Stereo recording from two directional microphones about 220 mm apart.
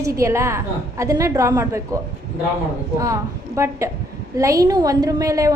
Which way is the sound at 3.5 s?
15° right (ahead or behind).